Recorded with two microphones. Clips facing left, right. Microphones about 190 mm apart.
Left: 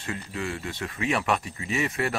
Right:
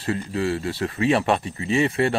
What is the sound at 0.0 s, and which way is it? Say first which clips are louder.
Speech: right 8 dB; 35° right (ahead or behind).